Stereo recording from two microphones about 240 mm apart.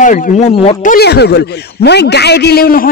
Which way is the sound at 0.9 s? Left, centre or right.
Left.